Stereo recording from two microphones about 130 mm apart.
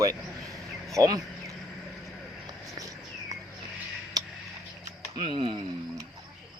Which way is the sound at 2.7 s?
25° right (ahead or behind).